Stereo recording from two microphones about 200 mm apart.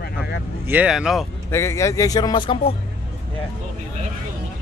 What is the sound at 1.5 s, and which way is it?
Speech, 15° left (ahead or behind).